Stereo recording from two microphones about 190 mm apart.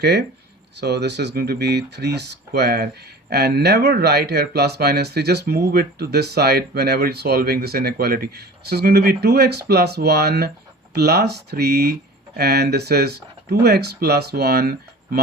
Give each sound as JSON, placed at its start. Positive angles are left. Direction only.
{"t": 0.0, "sound": "speech", "side_deg": -60}